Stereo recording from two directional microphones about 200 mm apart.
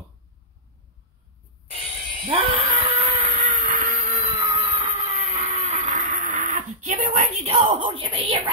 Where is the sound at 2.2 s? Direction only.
25° right (ahead or behind).